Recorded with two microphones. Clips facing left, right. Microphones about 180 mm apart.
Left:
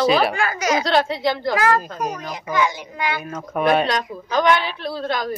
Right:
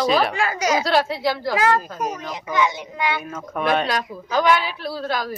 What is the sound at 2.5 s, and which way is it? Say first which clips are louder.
Speech: even; 25° right (ahead or behind).